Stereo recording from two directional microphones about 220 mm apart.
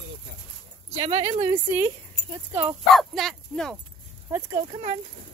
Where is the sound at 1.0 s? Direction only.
25° right (ahead or behind).